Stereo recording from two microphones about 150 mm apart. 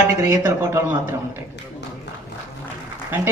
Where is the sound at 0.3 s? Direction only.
25° right (ahead or behind).